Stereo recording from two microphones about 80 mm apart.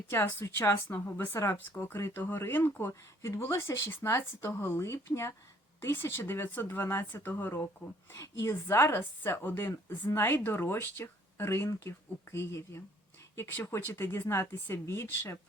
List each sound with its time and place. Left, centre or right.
0.1 s speech: left
3.2 s speech: left
8.1 s speech: left